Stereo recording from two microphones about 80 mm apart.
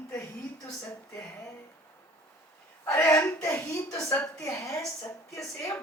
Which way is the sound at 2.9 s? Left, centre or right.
Left.